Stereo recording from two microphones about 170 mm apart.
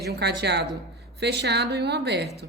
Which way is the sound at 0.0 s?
75° right (ahead or behind).